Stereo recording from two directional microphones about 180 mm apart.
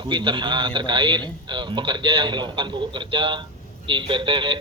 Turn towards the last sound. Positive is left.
turn(degrees=-30)  # may be behind; listen again after turning